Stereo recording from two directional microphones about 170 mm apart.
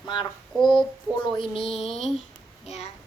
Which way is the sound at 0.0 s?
25° left (ahead or behind).